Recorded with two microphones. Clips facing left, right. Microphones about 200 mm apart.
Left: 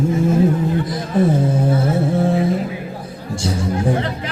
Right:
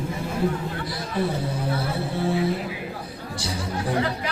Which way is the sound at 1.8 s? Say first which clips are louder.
Left 9 dB; 45° left (ahead or behind).